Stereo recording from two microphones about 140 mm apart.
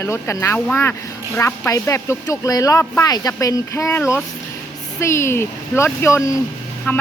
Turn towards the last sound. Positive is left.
turn(degrees=15)  # may be behind; listen again after turning